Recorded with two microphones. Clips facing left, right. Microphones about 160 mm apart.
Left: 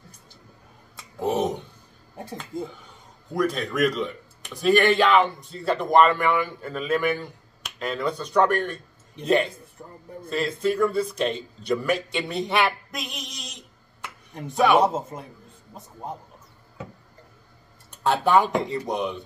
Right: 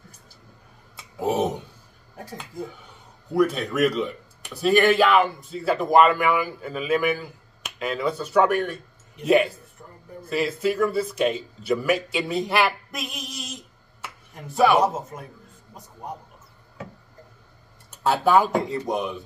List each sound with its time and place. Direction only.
0.9 s a sound: 10° right (ahead or behind)
2.5 s a man's voice: 25° left (ahead or behind)
3.3 s speech: 10° right (ahead or behind)
9.8 s a man's voice: 20° left (ahead or behind)
10.3 s speech: 5° right (ahead or behind)
14.8 s a man's voice: 30° left (ahead or behind)
18.0 s speech: 5° right (ahead or behind)